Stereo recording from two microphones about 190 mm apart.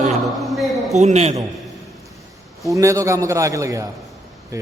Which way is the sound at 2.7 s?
15° right (ahead or behind).